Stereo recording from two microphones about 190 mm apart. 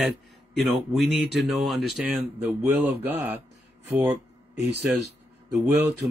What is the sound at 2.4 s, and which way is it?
Speech, 10° right (ahead or behind).